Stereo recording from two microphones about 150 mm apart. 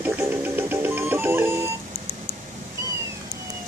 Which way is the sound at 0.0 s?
15° right (ahead or behind).